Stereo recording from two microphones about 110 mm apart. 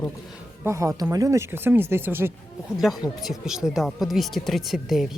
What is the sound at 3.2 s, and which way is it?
Speech, 5° right (ahead or behind).